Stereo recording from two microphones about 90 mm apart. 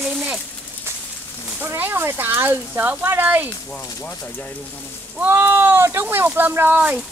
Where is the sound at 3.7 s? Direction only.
15° left (ahead or behind).